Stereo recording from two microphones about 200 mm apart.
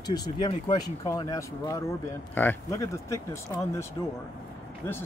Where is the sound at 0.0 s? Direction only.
20° left (ahead or behind).